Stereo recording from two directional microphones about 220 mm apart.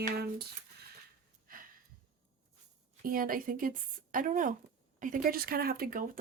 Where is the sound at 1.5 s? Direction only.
40° right (ahead or behind).